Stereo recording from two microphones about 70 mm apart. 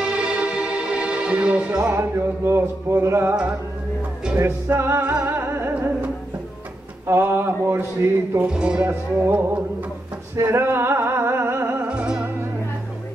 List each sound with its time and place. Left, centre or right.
0.0 s music: centre
2.0 s music: right
4.4 s music: right
7.1 s music: right
8.4 s speech: centre
8.8 s music: right
10.3 s music: right
11.9 s music: centre